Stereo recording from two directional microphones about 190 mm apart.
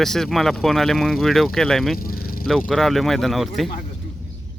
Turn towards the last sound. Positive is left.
turn(degrees=0)  # may be behind; listen again after turning